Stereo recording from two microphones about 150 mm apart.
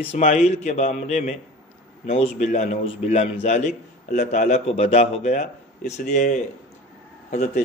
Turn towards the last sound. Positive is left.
turn(degrees=55)  # may be behind; listen again after turning